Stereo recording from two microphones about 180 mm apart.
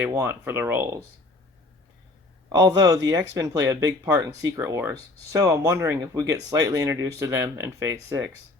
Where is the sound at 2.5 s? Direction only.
20° right (ahead or behind).